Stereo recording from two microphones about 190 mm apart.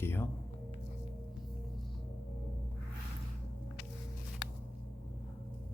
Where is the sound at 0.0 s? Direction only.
10° left (ahead or behind).